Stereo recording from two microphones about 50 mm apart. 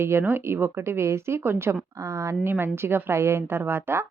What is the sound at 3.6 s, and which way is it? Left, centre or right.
Speech, right.